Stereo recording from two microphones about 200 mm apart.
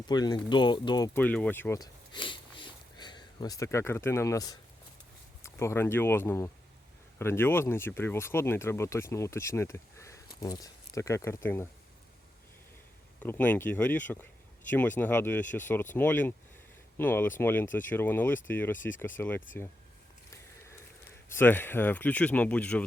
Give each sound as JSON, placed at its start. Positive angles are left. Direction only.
{"t": 0.1, "sound": "speech", "side_deg": 20}
{"t": 13.1, "sound": "speech", "side_deg": 10}
{"t": 21.2, "sound": "speech", "side_deg": 10}